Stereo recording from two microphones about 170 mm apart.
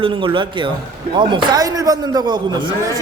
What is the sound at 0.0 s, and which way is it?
Speech, 30° right (ahead or behind).